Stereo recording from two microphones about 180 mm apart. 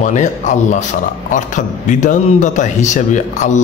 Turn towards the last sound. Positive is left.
turn(degrees=40)  # may be behind; listen again after turning